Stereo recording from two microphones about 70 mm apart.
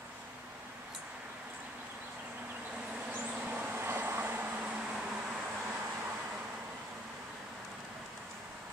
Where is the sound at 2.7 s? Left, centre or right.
Centre.